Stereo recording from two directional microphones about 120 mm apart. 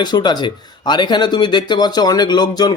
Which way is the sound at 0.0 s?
35° left (ahead or behind).